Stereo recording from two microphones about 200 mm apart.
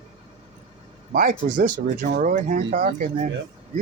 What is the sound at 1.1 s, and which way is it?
Speech, 40° right (ahead or behind).